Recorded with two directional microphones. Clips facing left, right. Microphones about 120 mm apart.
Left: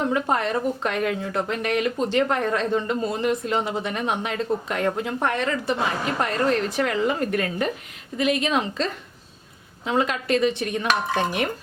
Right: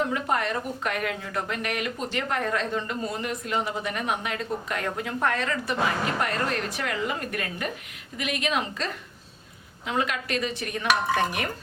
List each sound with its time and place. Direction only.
0.1 s a woman's voice: 30° left (ahead or behind)